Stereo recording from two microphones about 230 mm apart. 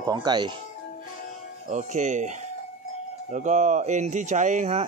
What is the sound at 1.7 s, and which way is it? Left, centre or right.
Speech, right.